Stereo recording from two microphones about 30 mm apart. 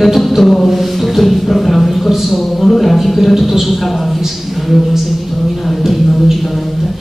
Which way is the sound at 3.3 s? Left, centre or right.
Centre.